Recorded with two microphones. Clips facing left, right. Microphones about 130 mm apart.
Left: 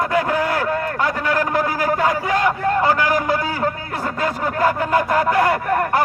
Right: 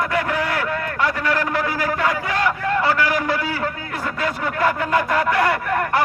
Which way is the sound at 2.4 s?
45° left (ahead or behind).